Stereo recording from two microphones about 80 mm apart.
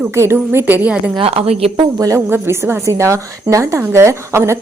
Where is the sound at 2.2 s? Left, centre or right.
Right.